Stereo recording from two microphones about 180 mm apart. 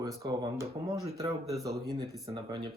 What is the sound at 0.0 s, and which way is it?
Speech, 20° right (ahead or behind).